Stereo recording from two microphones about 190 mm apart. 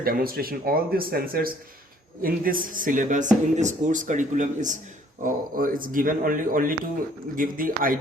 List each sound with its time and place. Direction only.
0.0 s speech: 50° right (ahead or behind)